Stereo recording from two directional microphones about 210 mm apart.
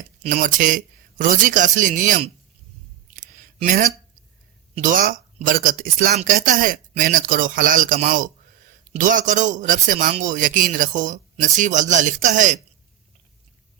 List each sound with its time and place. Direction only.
0.2 s a man's voice: 35° right (ahead or behind)
3.2 s a sound: 40° right (ahead or behind)
4.7 s a man's voice: 40° right (ahead or behind)